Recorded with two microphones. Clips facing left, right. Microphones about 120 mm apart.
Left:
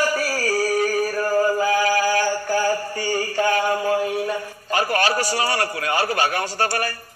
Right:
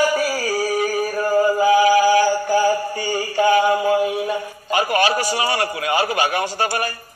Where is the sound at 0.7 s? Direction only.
20° right (ahead or behind).